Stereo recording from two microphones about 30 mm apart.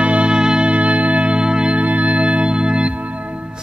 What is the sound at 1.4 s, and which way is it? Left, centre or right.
Music, right.